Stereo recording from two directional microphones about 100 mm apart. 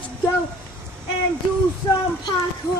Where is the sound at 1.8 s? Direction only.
35° left (ahead or behind).